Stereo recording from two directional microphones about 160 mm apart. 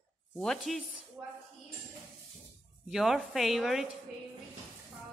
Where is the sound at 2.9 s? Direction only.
Centre (ahead or behind).